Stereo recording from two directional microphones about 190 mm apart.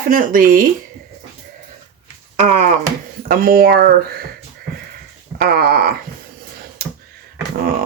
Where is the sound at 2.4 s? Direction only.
40° right (ahead or behind).